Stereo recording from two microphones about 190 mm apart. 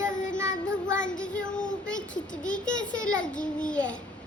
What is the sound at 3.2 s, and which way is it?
Speech, 5° left (ahead or behind).